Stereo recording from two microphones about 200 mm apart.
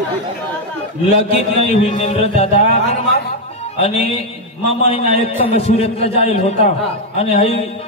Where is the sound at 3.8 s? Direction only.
30° left (ahead or behind).